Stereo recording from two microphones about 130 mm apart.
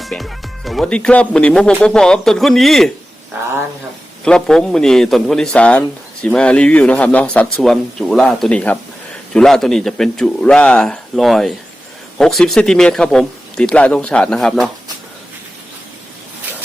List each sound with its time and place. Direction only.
0.0 s a man's voice: centre (ahead or behind)
4.2 s a man's voice: 5° left (ahead or behind)